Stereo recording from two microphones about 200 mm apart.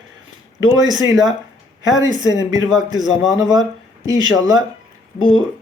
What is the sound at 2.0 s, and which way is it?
Speech, 20° right (ahead or behind).